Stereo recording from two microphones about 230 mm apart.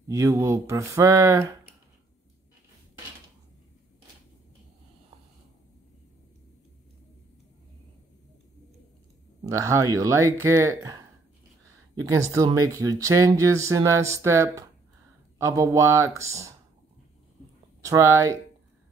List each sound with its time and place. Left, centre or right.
0.1 s speech: centre
9.4 s speech: centre
17.8 s speech: centre